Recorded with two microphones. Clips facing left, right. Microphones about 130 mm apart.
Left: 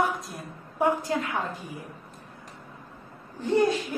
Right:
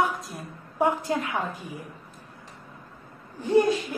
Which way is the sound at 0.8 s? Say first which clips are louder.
Right 1 dB; 20° right (ahead or behind).